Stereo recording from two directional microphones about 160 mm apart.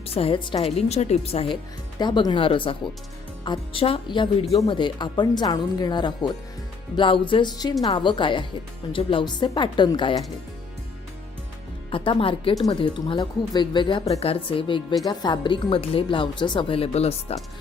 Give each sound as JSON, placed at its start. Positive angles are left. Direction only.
{"t": 0.0, "sound": "speech", "side_deg": 35}
{"t": 2.0, "sound": "a woman's voice", "side_deg": 25}
{"t": 11.9, "sound": "speech", "side_deg": 35}